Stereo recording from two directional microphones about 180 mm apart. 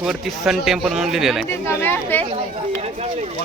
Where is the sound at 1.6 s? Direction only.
10° left (ahead or behind).